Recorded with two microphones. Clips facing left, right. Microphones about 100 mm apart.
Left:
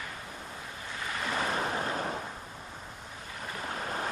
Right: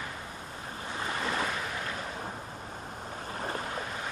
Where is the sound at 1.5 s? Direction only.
40° left (ahead or behind).